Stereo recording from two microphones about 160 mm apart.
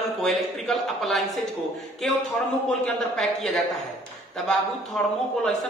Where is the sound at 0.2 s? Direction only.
Centre (ahead or behind).